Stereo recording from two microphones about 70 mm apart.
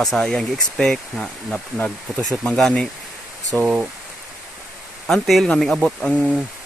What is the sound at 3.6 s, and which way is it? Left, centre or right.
Speech, centre.